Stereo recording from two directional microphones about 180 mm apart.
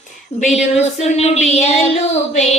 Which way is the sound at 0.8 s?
35° left (ahead or behind).